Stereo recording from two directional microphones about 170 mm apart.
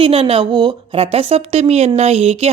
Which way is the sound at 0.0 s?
35° right (ahead or behind).